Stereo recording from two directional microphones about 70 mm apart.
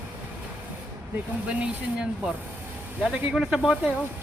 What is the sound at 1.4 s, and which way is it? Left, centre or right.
Speech, centre.